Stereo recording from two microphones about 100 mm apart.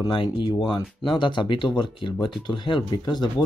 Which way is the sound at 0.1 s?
55° left (ahead or behind).